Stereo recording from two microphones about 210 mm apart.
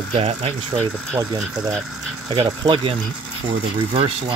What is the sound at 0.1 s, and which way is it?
Speech, 30° right (ahead or behind).